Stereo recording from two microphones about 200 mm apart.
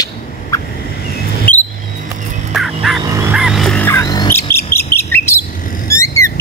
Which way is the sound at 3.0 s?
15° right (ahead or behind).